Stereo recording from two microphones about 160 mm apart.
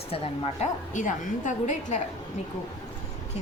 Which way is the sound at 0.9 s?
50° left (ahead or behind).